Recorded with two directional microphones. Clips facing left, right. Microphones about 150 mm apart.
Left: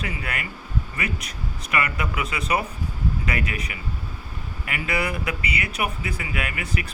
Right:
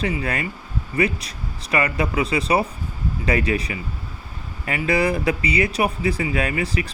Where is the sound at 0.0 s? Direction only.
30° right (ahead or behind).